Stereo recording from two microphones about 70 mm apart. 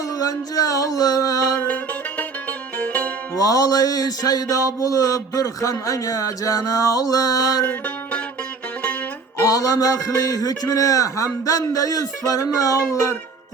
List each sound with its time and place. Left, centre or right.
0.2 s music: left
1.6 s music: centre
3.3 s music: left
7.6 s music: left
9.4 s music: left